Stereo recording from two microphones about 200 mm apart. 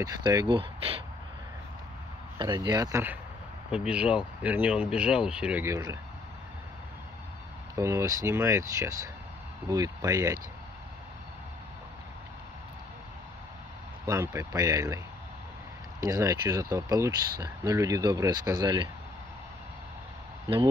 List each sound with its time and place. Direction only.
0.0 s speech: 20° right (ahead or behind)
2.3 s speech: 20° right (ahead or behind)
7.7 s speech: 15° right (ahead or behind)
14.0 s speech: 15° right (ahead or behind)
16.0 s speech: 15° right (ahead or behind)